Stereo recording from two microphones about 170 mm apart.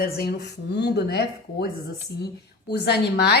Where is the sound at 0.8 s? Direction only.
75° left (ahead or behind).